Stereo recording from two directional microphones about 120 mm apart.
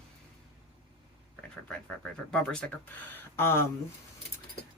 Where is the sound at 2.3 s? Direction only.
5° left (ahead or behind).